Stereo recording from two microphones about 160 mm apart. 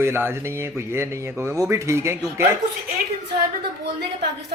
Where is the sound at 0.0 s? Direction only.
15° right (ahead or behind).